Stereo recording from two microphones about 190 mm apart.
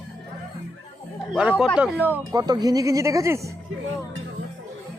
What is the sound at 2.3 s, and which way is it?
Speech, 20° right (ahead or behind).